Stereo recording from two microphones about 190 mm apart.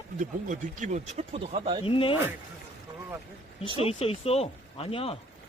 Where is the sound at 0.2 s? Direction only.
40° right (ahead or behind).